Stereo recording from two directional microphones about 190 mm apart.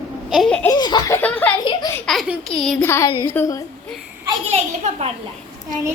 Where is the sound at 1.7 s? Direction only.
20° left (ahead or behind).